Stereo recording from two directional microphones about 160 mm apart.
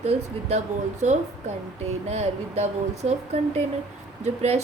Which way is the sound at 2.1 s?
40° right (ahead or behind).